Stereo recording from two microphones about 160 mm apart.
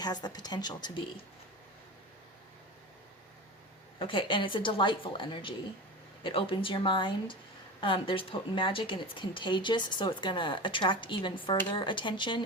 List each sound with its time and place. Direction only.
0.0 s speech: 25° left (ahead or behind)
3.9 s speech: 30° left (ahead or behind)